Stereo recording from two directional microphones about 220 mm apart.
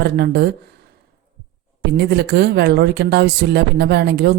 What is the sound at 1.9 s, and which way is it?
Speech, 50° right (ahead or behind).